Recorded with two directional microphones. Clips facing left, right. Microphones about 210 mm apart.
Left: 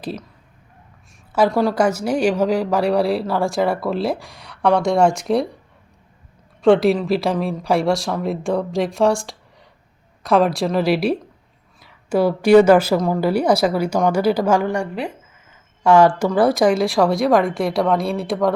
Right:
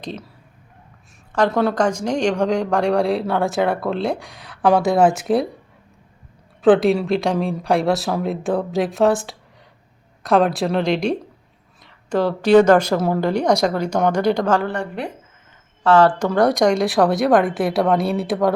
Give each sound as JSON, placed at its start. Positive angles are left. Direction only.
{"t": 1.3, "sound": "speech", "side_deg": 5}
{"t": 6.6, "sound": "a woman's voice", "side_deg": 0}